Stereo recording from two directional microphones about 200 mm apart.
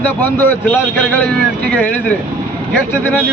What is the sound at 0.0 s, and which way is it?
Speech, 10° left (ahead or behind).